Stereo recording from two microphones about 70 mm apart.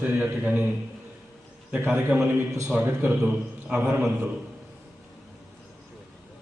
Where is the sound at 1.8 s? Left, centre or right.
Right.